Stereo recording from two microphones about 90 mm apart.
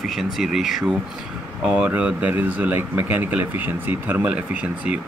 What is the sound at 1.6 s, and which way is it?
Speech, 15° right (ahead or behind).